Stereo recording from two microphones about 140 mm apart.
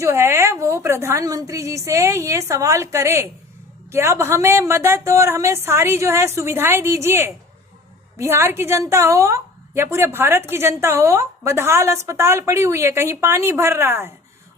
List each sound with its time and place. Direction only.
0.0 s a woman's voice: 20° right (ahead or behind)